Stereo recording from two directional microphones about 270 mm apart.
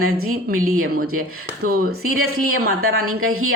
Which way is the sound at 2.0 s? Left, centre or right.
Right.